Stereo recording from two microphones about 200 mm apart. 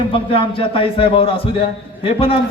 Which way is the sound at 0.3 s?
25° left (ahead or behind).